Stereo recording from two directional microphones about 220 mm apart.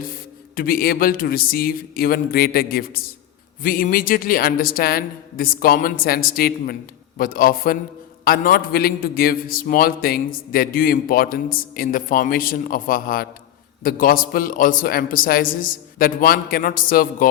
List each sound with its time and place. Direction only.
0.5 s a man's voice: 40° left (ahead or behind)